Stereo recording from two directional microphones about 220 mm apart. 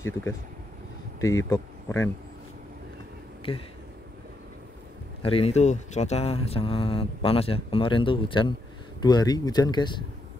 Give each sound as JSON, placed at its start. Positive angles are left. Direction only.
{"t": 0.0, "sound": "speech", "side_deg": 10}
{"t": 1.5, "sound": "speech", "side_deg": 10}
{"t": 3.5, "sound": "speech", "side_deg": 25}
{"t": 5.2, "sound": "speech", "side_deg": 25}